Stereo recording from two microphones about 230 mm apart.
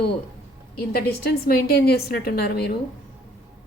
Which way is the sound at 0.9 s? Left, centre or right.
Left.